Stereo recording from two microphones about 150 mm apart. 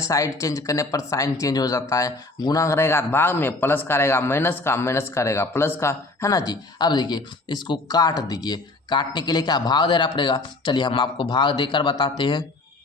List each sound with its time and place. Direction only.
0.0 s speech: 20° left (ahead or behind)